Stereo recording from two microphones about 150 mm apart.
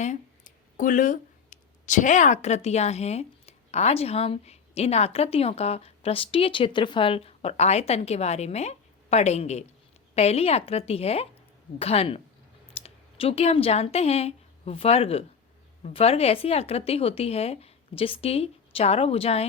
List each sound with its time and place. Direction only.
0.0 s speech: 55° left (ahead or behind)